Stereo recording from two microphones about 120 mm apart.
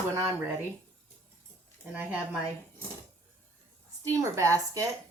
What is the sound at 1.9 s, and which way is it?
Speech, 10° right (ahead or behind).